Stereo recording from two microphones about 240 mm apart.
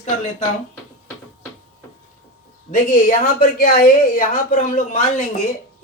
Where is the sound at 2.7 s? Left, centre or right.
Left.